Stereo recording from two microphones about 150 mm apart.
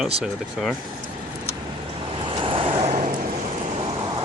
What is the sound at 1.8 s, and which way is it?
Vehicle, 35° right (ahead or behind).